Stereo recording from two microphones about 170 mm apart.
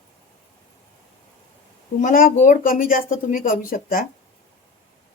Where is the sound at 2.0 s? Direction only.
50° left (ahead or behind).